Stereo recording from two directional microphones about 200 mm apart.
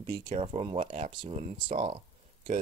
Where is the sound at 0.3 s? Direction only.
30° right (ahead or behind).